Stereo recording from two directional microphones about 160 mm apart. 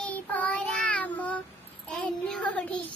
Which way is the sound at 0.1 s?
10° left (ahead or behind).